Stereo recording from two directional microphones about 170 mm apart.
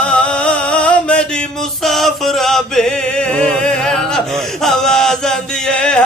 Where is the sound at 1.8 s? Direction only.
Centre (ahead or behind).